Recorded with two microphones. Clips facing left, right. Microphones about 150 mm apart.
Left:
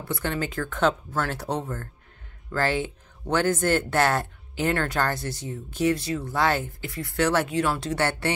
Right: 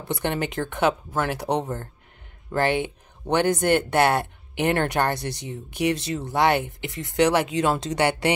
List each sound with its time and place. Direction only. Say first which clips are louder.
0.0 s speech: right 2 dB; 20° right (ahead or behind)